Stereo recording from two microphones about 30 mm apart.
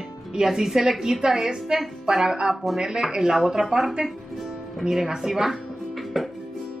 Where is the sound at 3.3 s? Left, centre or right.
Centre.